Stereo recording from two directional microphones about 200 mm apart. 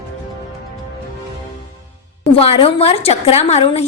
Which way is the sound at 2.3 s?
30° left (ahead or behind).